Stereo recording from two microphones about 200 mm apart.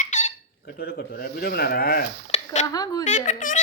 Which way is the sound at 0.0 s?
35° left (ahead or behind).